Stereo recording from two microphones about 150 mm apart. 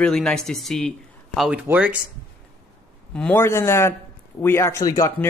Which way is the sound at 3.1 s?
10° left (ahead or behind).